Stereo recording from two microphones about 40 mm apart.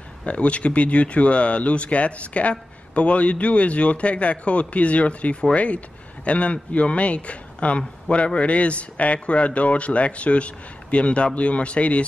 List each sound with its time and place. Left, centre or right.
0.2 s a man's voice: left